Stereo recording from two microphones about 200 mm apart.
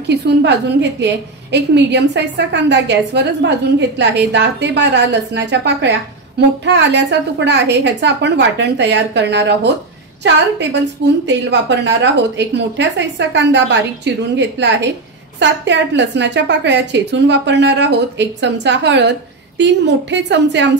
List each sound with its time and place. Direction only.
0.1 s a woman's voice: 60° right (ahead or behind)
11.2 s a woman's voice: 60° right (ahead or behind)